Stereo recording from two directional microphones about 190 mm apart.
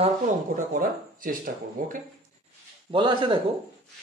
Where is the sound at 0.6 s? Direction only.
45° right (ahead or behind).